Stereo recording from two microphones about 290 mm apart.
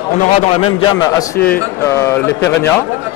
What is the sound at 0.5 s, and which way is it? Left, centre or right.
A man's voice, centre.